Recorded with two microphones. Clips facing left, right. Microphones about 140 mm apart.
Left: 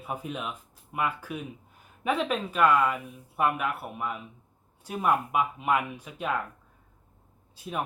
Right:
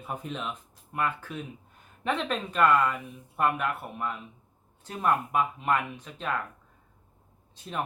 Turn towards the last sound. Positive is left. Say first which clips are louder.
# left 1 dB
turn(degrees=5)  # may be behind; listen again after turning